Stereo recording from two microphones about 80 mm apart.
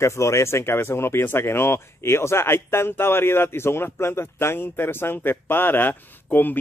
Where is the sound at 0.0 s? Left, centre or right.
Left.